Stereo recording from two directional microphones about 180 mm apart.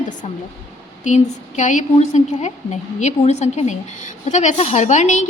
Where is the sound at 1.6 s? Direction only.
45° left (ahead or behind).